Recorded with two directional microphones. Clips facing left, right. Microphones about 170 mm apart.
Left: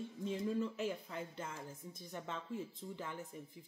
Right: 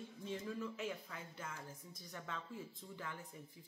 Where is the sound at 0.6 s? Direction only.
30° left (ahead or behind).